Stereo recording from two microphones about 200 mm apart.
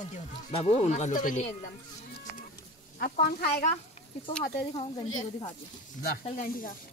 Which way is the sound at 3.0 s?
50° left (ahead or behind).